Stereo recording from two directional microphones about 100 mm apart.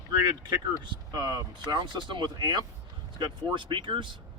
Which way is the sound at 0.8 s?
45° right (ahead or behind).